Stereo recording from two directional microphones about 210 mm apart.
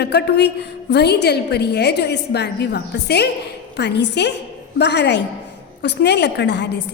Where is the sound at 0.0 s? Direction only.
50° left (ahead or behind).